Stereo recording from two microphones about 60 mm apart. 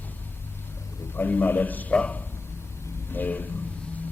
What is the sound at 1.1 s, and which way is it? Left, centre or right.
A man's voice, left.